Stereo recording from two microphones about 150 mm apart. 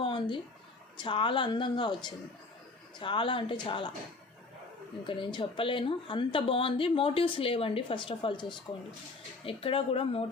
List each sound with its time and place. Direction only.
0.0 s a sound: 35° left (ahead or behind)
0.9 s a woman's voice: 35° left (ahead or behind)
5.0 s a woman's voice: 35° left (ahead or behind)